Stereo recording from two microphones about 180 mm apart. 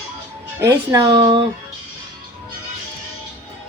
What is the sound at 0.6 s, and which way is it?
Speech, 15° right (ahead or behind).